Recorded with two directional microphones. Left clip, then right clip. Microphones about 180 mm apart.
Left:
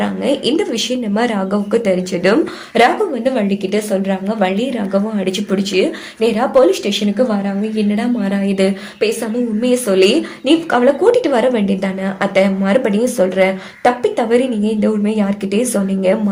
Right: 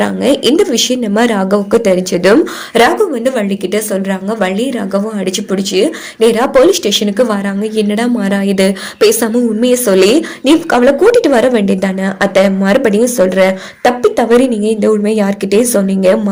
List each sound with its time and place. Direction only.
0.0 s a woman's voice: 40° right (ahead or behind); by 5.8 s 25° right (ahead or behind)
6.1 s speech: 45° right (ahead or behind)
7.8 s a woman's voice: 60° right (ahead or behind)
9.6 s a woman's voice: 45° right (ahead or behind)